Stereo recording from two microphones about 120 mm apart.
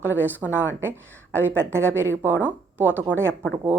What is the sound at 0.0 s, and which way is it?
A woman's voice, 15° right (ahead or behind).